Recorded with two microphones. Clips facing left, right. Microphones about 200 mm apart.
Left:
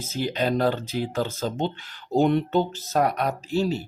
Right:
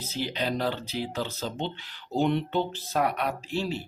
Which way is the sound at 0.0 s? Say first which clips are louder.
Left 5 dB; 45° left (ahead or behind).